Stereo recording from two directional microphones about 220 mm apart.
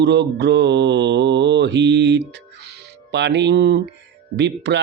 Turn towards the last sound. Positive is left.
turn(degrees=-50)  # may be behind; listen again after turning